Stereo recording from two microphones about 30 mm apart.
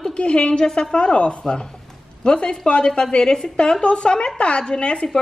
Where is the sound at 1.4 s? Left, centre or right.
Left.